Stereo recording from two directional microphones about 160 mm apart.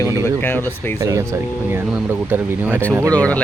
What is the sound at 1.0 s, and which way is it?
Speech, 20° right (ahead or behind).